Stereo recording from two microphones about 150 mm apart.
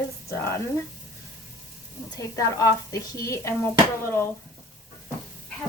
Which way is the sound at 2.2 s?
20° left (ahead or behind).